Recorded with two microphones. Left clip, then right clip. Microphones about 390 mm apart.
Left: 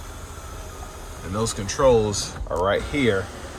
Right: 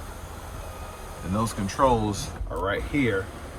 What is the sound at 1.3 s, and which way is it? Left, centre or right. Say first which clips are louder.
Speech: left 1 dB; centre.